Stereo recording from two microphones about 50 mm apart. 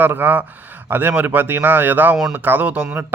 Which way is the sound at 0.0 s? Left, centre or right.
Right.